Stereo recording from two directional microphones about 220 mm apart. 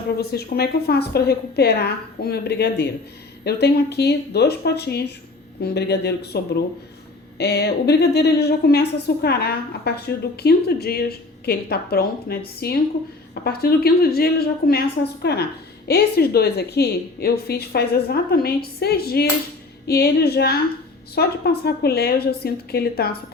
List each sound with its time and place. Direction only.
0.2 s a woman's voice: 45° left (ahead or behind)